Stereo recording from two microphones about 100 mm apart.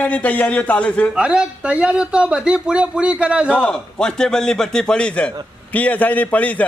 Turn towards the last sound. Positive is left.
turn(degrees=15)  # may be behind; listen again after turning